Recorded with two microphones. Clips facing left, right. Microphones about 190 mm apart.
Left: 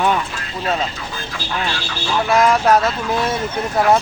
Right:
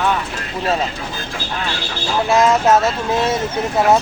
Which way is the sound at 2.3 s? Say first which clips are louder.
Right 1 dB; 25° right (ahead or behind).